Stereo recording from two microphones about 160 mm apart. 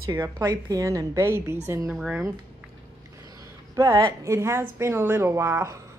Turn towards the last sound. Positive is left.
turn(degrees=-15)  # may be behind; listen again after turning